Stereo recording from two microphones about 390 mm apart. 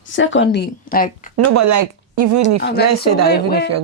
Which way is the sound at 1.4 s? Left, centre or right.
Right.